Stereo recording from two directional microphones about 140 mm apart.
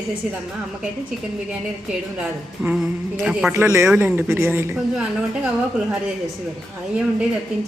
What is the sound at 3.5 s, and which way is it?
Speech, 20° right (ahead or behind).